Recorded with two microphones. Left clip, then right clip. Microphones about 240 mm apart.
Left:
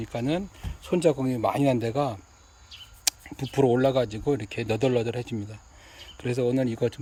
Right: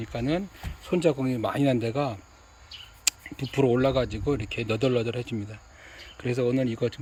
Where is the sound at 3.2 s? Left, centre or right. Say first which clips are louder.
Left 2 dB; centre.